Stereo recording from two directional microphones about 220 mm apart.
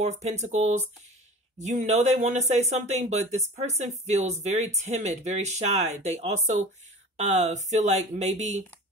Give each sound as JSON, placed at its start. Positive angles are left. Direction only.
{"t": 0.0, "sound": "speech", "side_deg": -30}